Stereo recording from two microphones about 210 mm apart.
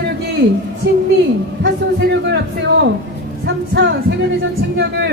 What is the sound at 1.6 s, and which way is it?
Speech, 55° right (ahead or behind).